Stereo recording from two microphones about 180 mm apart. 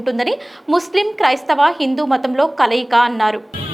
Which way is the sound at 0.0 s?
Centre (ahead or behind).